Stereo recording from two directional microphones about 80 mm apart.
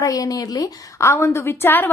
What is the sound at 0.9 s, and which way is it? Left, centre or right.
Speech, left.